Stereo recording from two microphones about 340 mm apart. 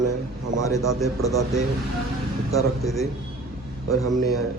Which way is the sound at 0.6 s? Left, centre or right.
Centre.